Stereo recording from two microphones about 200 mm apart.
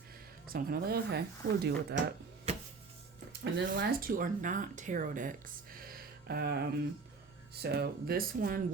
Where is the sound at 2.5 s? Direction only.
35° right (ahead or behind).